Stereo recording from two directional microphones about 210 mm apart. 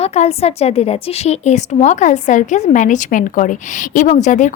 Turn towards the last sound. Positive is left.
turn(degrees=35)  # may be behind; listen again after turning